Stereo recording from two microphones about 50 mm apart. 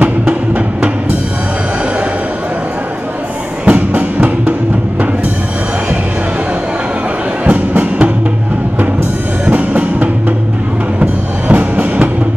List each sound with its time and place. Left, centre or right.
3.6 s music: right
7.4 s music: right
9.5 s music: right